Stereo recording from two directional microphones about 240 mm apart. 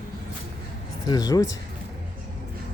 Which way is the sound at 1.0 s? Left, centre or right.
Centre.